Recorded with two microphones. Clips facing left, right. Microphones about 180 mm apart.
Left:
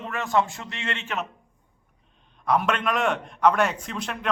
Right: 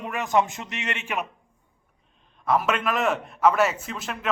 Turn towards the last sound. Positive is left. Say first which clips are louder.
# left 1 dB
turn(degrees=0)  # may be behind; listen again after turning